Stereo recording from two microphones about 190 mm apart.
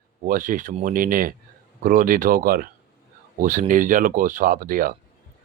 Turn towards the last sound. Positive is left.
turn(degrees=-50)  # may be behind; listen again after turning